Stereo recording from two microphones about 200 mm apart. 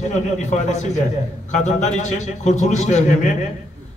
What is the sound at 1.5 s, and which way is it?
A man's voice, 35° left (ahead or behind).